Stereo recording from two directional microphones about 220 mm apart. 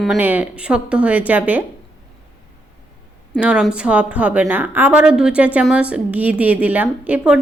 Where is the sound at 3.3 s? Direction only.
5° right (ahead or behind).